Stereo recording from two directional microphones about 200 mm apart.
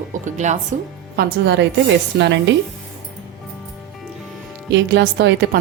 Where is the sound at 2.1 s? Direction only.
55° right (ahead or behind).